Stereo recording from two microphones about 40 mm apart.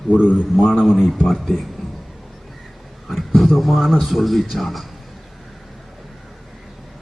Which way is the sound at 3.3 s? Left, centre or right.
Centre.